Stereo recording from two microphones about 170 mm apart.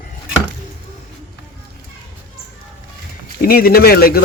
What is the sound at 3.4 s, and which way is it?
Speech, 60° left (ahead or behind).